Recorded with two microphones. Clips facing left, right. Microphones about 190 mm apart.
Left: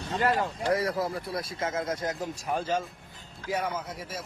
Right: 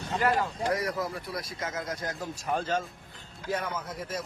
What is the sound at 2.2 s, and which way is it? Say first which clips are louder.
A man's voice: even; 10° left (ahead or behind).